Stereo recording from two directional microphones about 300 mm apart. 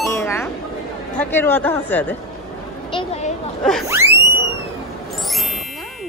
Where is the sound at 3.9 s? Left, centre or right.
Centre.